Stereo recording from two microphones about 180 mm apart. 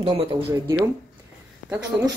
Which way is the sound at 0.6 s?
15° right (ahead or behind).